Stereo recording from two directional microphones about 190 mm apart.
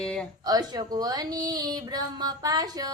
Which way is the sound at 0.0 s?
5° left (ahead or behind).